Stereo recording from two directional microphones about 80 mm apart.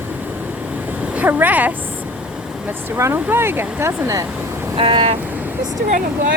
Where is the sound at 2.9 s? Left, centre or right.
Right.